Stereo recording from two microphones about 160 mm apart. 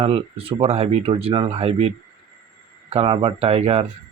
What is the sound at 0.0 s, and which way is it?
Speech, 35° right (ahead or behind).